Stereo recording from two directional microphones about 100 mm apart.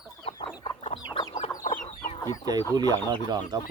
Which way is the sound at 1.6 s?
90° left.